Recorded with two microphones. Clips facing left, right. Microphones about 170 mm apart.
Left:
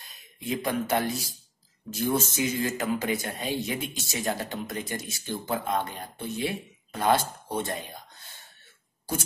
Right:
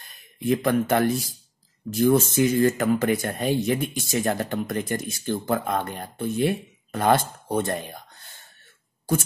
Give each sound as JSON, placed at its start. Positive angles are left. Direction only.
{"t": 0.0, "sound": "speech", "side_deg": -55}